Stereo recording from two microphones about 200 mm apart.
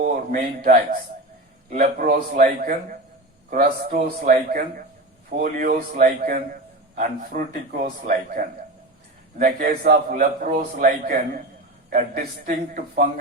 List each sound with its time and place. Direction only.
0.0 s a man's voice: 45° right (ahead or behind)